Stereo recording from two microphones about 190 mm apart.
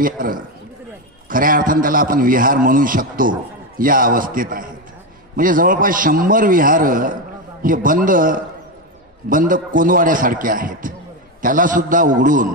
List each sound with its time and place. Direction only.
0.0 s a man's voice: 45° right (ahead or behind)